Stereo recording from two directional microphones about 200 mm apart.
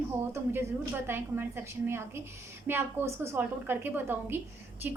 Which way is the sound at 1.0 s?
10° right (ahead or behind).